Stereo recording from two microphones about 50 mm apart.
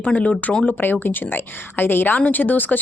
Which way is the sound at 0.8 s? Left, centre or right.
Left.